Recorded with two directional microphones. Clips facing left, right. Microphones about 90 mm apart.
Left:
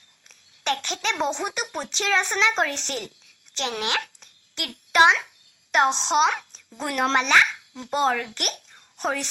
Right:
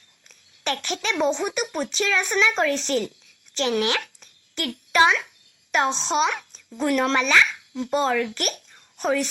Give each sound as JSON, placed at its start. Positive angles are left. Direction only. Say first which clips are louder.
{"t": 0.3, "sound": "a woman's voice", "louder": "left 1 dB", "side_deg": 25}